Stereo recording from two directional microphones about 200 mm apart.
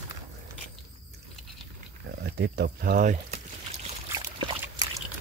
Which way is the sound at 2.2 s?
55° right (ahead or behind).